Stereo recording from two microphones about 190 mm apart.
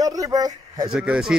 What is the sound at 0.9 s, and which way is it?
Speech, 5° right (ahead or behind).